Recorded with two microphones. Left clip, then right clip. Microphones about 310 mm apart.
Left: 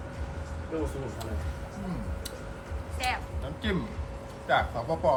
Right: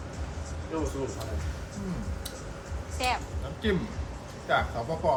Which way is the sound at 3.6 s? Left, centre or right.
Centre.